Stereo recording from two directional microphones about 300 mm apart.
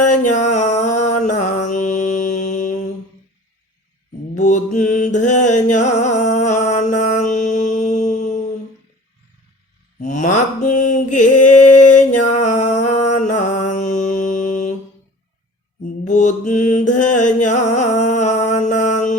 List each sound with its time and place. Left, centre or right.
0.0 s music: left
4.4 s mantra: left
5.5 s music: left
10.0 s mantra: left
15.8 s mantra: left
18.8 s music: left